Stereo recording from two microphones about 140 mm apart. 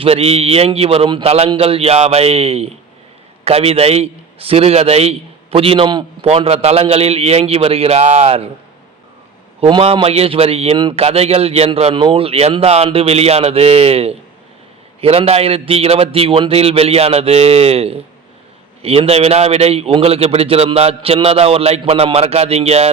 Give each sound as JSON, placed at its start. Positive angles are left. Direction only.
{"t": 0.0, "sound": "a man's voice", "side_deg": -45}
{"t": 9.6, "sound": "a man's voice", "side_deg": -40}